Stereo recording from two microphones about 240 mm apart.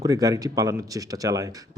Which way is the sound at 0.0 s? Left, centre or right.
Centre.